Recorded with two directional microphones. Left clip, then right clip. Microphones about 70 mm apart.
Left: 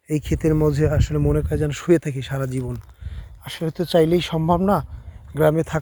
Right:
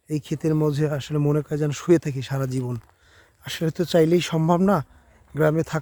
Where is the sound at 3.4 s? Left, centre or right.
Right.